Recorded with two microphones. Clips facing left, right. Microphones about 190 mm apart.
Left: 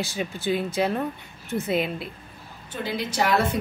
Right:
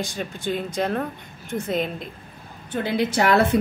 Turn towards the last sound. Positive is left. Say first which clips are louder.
# right 4 dB
turn(degrees=-55)  # may be behind; listen again after turning